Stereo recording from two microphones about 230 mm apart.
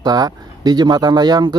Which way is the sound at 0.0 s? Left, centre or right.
Centre.